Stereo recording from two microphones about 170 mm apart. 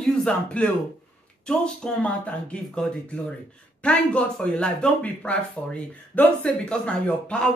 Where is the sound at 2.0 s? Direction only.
5° left (ahead or behind).